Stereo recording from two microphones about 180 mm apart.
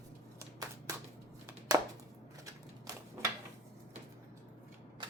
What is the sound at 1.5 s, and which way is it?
Chopping, 20° right (ahead or behind).